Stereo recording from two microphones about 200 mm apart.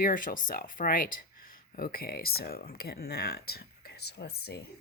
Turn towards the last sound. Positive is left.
turn(degrees=55)  # may be behind; listen again after turning